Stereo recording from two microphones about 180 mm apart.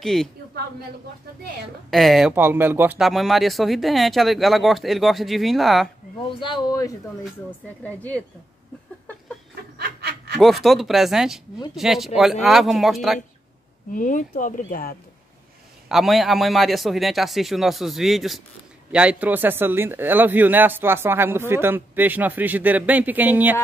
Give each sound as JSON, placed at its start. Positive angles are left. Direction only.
{"t": 0.0, "sound": "speech", "side_deg": 0}
{"t": 1.9, "sound": "speech", "side_deg": 0}
{"t": 2.3, "sound": "speech", "side_deg": -10}
{"t": 3.1, "sound": "speech", "side_deg": 0}
{"t": 6.4, "sound": "speech", "side_deg": 25}
{"t": 7.8, "sound": "a woman's voice", "side_deg": 10}
{"t": 9.8, "sound": "snicker", "side_deg": -60}
{"t": 10.3, "sound": "speech", "side_deg": 0}
{"t": 13.9, "sound": "speech", "side_deg": 45}
{"t": 15.9, "sound": "speech", "side_deg": 0}